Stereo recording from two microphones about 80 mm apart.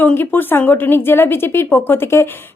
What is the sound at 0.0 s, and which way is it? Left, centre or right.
A woman's voice, left.